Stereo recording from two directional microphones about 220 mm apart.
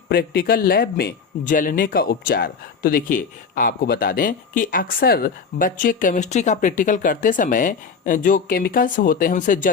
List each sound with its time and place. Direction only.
0.1 s speech: 45° left (ahead or behind)